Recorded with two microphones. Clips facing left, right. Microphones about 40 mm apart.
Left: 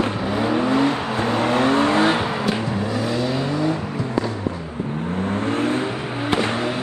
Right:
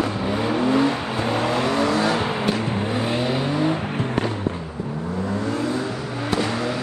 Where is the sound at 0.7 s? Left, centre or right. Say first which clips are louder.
Left 1 dB; left.